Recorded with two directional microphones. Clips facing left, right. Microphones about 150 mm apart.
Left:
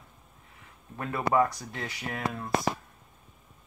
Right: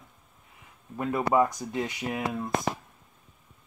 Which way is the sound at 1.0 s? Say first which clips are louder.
Right 2 dB; 15° right (ahead or behind).